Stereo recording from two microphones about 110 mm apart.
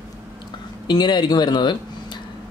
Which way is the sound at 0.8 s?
40° left (ahead or behind).